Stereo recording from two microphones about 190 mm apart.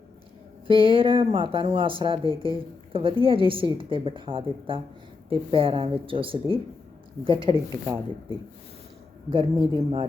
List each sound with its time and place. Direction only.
0.7 s a woman's voice: 30° right (ahead or behind)
9.3 s a woman's voice: 30° right (ahead or behind)